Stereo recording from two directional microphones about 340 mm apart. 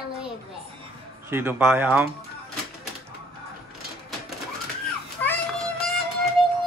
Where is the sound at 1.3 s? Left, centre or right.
Centre.